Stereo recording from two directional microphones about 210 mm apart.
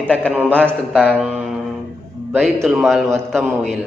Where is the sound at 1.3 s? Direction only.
5° right (ahead or behind).